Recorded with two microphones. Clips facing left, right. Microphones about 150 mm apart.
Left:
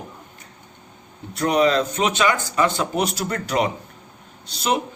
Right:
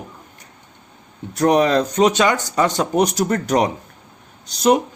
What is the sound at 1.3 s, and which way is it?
Speech, 45° right (ahead or behind).